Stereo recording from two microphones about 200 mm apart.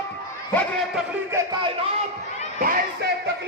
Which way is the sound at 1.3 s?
20° right (ahead or behind).